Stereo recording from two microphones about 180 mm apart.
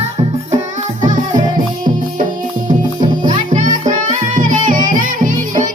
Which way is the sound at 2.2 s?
50° right (ahead or behind).